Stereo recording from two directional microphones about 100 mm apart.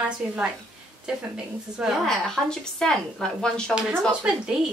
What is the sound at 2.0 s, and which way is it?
Speech, 5° left (ahead or behind).